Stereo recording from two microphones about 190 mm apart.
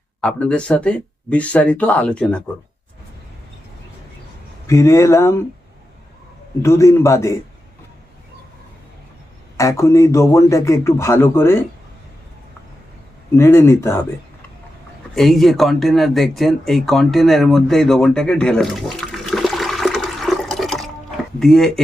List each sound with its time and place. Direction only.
0.2 s speech: 5° left (ahead or behind)
4.6 s speech: 15° left (ahead or behind)
6.6 s speech: 15° left (ahead or behind)
9.6 s speech: 15° left (ahead or behind)
13.3 s speech: 15° left (ahead or behind)
15.1 s speech: centre (ahead or behind)